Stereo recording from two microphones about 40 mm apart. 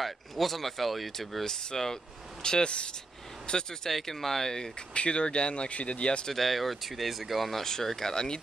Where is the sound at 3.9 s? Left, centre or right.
Centre.